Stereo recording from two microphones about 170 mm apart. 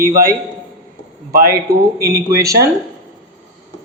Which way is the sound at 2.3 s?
20° right (ahead or behind).